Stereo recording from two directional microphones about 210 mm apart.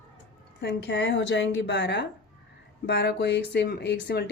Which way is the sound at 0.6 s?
55° left (ahead or behind).